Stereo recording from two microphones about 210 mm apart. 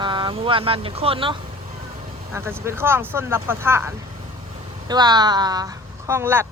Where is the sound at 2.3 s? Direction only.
10° right (ahead or behind).